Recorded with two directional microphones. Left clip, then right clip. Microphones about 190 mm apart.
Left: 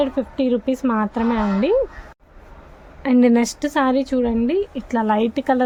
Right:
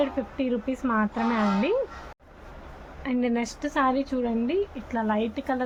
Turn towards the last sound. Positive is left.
turn(degrees=60)  # may be behind; listen again after turning